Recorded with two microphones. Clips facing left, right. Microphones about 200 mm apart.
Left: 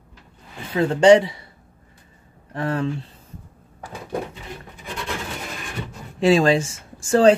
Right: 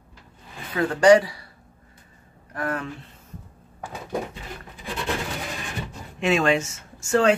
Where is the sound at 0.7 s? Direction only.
25° left (ahead or behind).